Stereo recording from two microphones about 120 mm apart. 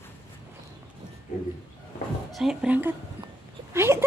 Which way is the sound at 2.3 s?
5° right (ahead or behind).